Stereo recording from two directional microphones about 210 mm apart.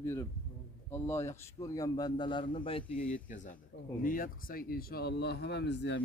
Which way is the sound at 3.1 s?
35° left (ahead or behind).